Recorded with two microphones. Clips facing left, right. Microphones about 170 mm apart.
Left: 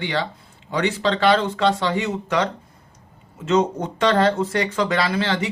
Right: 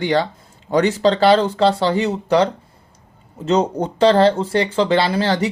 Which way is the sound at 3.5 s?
35° right (ahead or behind).